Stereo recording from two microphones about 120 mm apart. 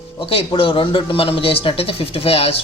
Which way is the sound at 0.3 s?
50° left (ahead or behind).